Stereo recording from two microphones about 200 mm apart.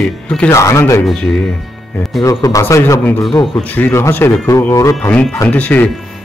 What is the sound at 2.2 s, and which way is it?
Speech, 15° left (ahead or behind).